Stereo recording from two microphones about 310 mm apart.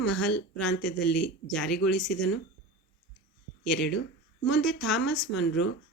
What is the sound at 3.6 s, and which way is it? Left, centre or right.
A woman's voice, centre.